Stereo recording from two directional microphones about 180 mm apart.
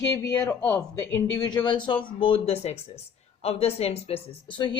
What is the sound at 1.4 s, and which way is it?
A woman's voice, 25° left (ahead or behind).